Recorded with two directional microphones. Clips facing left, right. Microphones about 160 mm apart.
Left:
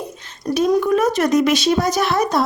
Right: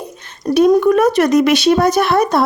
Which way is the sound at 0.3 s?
60° right (ahead or behind).